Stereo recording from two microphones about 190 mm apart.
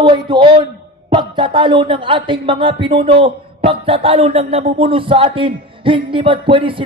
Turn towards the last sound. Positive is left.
turn(degrees=-25)  # may be behind; listen again after turning